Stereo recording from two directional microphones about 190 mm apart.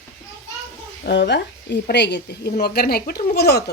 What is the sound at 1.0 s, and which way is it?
A woman's voice, 65° left (ahead or behind).